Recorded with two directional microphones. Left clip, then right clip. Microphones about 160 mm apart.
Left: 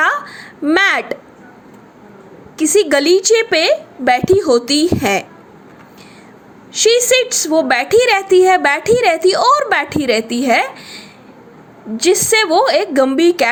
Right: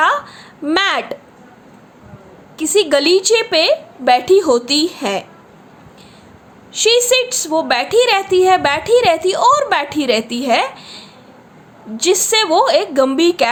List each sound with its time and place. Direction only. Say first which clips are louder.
0.0 s a sound: right 1 dB; 15° left (ahead or behind)
0.6 s a woman's voice: left 3 dB; 15° left (ahead or behind)
2.6 s a woman's voice: left 1 dB; 15° left (ahead or behind)
6.7 s a woman's voice: left 1 dB; 15° left (ahead or behind)